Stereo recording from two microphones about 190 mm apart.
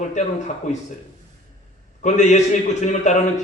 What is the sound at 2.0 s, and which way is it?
A man's voice, 40° left (ahead or behind).